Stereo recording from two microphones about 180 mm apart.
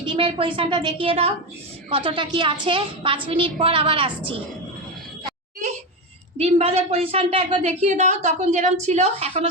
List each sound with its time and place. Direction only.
0.0 s a woman's voice: 30° right (ahead or behind)
6.3 s a woman's voice: 35° right (ahead or behind)